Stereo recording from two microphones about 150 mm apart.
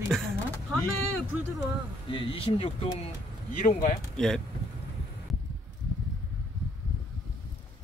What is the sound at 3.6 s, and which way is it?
Speech, 70° left (ahead or behind).